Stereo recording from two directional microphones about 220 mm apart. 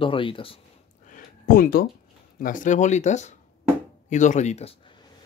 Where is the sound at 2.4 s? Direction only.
40° left (ahead or behind).